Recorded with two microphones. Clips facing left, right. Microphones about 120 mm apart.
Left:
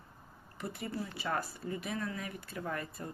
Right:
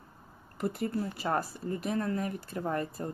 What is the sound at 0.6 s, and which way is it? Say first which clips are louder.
Speech: right 7 dB; 45° right (ahead or behind).